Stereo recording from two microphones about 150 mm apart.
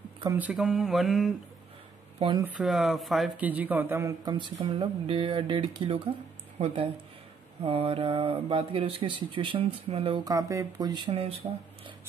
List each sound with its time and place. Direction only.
0.4 s mantra: 5° right (ahead or behind)
2.1 s speech: 35° right (ahead or behind)
2.4 s mantra: 5° right (ahead or behind)
3.3 s speech: 10° right (ahead or behind)
4.2 s speech: 30° right (ahead or behind)
10.2 s speech: 20° right (ahead or behind)
11.1 s speech: 40° right (ahead or behind)